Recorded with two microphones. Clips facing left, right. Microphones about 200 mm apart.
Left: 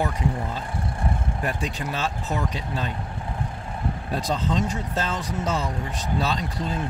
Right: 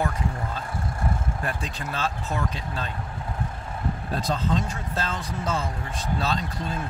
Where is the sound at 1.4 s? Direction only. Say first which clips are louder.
Left 3 dB; 15° left (ahead or behind).